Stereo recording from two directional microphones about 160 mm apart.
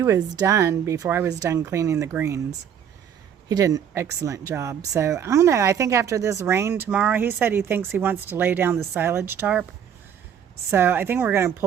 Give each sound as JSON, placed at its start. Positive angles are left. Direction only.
{"t": 0.0, "sound": "speech", "side_deg": -20}
{"t": 3.5, "sound": "speech", "side_deg": -20}
{"t": 10.7, "sound": "speech", "side_deg": -15}